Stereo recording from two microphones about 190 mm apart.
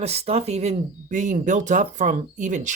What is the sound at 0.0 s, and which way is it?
Speech, 35° right (ahead or behind).